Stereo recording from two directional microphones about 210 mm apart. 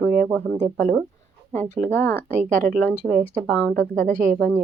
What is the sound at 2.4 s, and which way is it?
Speech, 40° right (ahead or behind).